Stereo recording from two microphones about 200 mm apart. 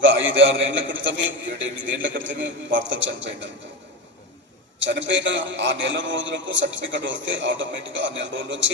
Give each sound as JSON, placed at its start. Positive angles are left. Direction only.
{"t": 0.0, "sound": "a man's voice", "side_deg": -70}
{"t": 4.9, "sound": "a man's voice", "side_deg": -70}